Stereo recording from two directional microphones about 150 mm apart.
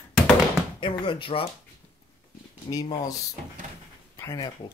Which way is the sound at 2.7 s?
25° left (ahead or behind).